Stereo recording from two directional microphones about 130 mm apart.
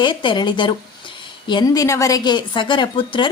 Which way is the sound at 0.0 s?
40° left (ahead or behind).